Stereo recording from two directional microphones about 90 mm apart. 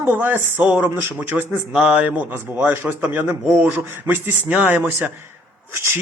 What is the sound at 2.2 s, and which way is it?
Speech, 25° right (ahead or behind).